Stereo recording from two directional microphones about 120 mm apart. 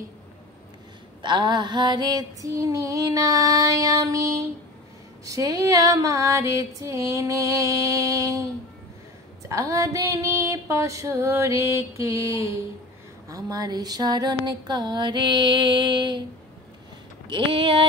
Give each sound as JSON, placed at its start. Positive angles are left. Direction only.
{"t": 1.2, "sound": "female singing", "side_deg": -40}
{"t": 9.5, "sound": "female singing", "side_deg": -25}
{"t": 13.3, "sound": "a sound", "side_deg": -35}
{"t": 17.3, "sound": "speech", "side_deg": -45}